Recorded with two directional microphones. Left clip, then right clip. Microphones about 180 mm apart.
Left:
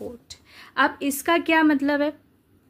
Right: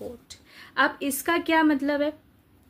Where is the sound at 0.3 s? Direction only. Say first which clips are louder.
Left 2 dB; 25° left (ahead or behind).